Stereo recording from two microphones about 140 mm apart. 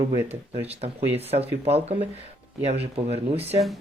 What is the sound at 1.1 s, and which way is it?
Speech, 45° right (ahead or behind).